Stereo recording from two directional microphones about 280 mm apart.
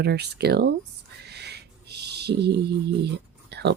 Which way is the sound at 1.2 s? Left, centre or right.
Right.